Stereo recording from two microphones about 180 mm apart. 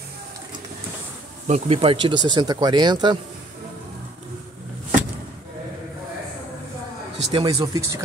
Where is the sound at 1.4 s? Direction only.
40° right (ahead or behind).